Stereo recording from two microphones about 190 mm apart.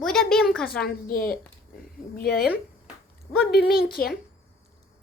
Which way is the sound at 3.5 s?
55° left (ahead or behind).